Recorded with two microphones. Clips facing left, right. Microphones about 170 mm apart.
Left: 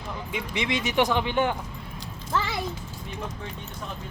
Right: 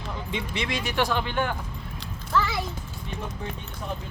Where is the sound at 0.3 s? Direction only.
15° left (ahead or behind).